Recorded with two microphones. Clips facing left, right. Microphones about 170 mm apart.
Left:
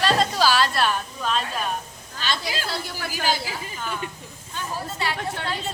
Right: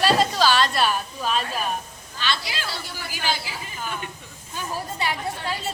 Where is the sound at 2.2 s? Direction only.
45° left (ahead or behind).